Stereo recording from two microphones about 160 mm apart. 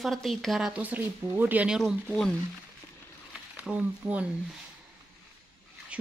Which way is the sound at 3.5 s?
10° right (ahead or behind).